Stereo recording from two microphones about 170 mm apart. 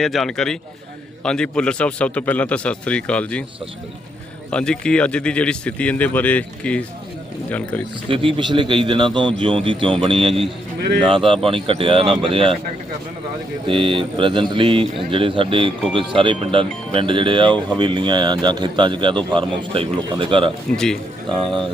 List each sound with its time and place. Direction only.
0.0 s speech: centre (ahead or behind)
4.5 s speech: 5° left (ahead or behind)
8.0 s speech: 30° right (ahead or behind)
9.6 s mantra: 30° right (ahead or behind)
11.4 s mantra: 30° right (ahead or behind)
13.7 s mantra: 30° right (ahead or behind)
15.9 s speech: 30° right (ahead or behind)
19.7 s mantra: 30° right (ahead or behind)
20.7 s speech: centre (ahead or behind)